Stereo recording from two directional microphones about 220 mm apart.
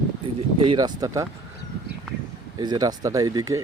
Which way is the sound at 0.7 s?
15° right (ahead or behind).